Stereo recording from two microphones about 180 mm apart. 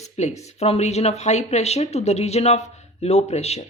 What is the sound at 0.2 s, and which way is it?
Speech, 40° left (ahead or behind).